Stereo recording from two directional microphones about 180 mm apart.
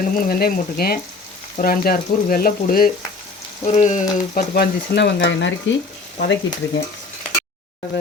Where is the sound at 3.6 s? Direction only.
40° left (ahead or behind).